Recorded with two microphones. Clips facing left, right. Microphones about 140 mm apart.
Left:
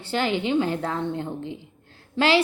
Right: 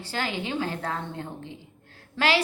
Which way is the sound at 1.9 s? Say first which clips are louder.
Left 4 dB; 25° left (ahead or behind).